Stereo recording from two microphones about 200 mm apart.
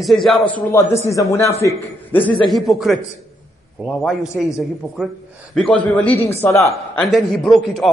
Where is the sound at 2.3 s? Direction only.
Centre (ahead or behind).